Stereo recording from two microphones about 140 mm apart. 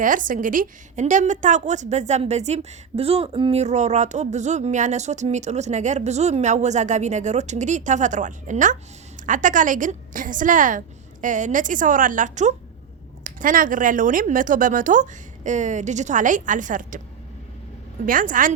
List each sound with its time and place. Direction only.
0.0 s speech: 70° right (ahead or behind); by 3.6 s 40° right (ahead or behind)
3.6 s speech: 55° right (ahead or behind)
13.2 s speech: 75° right (ahead or behind)
18.0 s speech: 75° right (ahead or behind)